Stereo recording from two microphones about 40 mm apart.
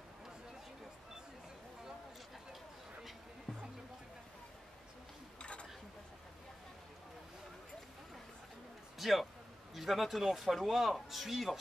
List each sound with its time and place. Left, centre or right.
5.4 s dishes: left
8.9 s a sound: centre
9.8 s speech: centre